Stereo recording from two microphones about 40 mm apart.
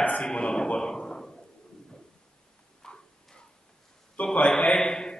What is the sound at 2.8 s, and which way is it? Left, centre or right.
Tick-tock, centre.